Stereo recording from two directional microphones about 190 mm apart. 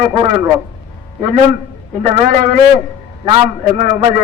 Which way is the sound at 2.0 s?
35° right (ahead or behind).